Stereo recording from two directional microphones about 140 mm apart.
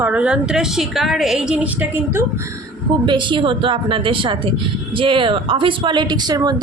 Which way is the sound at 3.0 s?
35° right (ahead or behind).